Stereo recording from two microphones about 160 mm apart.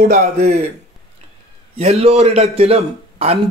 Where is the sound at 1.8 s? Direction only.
40° right (ahead or behind).